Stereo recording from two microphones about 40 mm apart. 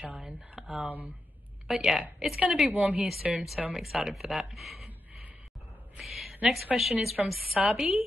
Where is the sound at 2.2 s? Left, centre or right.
Centre.